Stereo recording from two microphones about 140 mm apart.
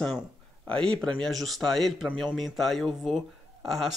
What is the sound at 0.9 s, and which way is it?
Speech, 35° right (ahead or behind).